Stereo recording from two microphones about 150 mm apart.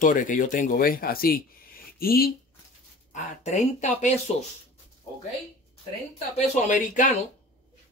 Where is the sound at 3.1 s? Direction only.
50° left (ahead or behind).